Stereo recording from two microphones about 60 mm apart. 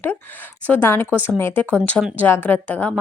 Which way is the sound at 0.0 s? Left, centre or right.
Left.